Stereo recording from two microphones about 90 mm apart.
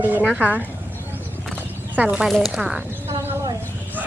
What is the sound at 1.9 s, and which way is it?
Speech, 20° right (ahead or behind).